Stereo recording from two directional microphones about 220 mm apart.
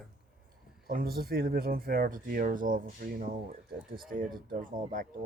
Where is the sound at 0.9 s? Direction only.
40° right (ahead or behind).